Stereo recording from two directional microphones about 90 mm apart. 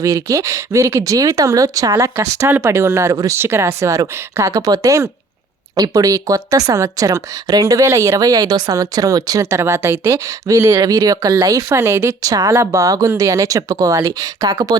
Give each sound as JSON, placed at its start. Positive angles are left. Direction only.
{"t": 0.0, "sound": "speech", "side_deg": -40}